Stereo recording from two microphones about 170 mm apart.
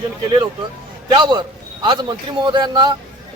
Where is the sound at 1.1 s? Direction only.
25° right (ahead or behind).